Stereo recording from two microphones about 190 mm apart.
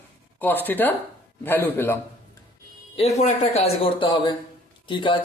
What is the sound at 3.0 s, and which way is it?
Speech, 35° left (ahead or behind).